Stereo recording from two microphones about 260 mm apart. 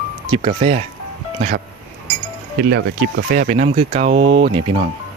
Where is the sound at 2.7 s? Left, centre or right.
Right.